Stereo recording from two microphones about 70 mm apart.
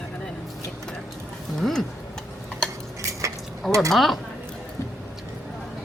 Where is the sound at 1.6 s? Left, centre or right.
Centre.